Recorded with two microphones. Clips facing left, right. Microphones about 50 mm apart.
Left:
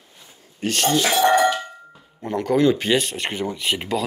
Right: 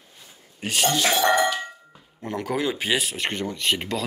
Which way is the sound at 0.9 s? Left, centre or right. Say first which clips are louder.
Left 4 dB; centre.